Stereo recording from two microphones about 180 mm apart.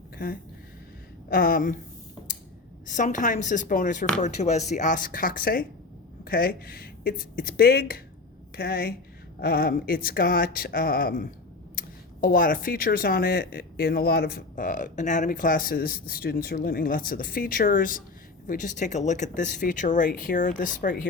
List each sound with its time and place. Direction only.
1.3 s speech: 55° left (ahead or behind)
2.8 s speech: 45° left (ahead or behind)